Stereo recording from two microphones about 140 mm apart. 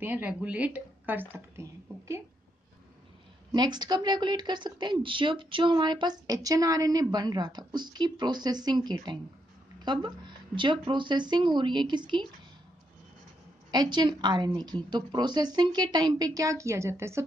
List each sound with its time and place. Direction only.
0.0 s a woman's voice: 10° right (ahead or behind)
3.5 s a woman's voice: 30° right (ahead or behind)
13.7 s speech: 30° right (ahead or behind)